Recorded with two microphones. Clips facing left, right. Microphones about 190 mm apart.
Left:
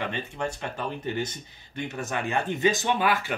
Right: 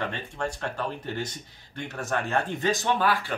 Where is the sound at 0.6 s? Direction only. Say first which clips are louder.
Right 1 dB; 20° left (ahead or behind).